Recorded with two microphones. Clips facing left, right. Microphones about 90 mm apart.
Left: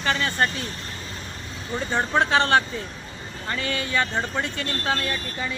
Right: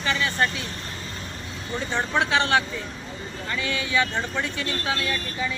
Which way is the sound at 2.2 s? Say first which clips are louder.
Left 2 dB; 40° left (ahead or behind).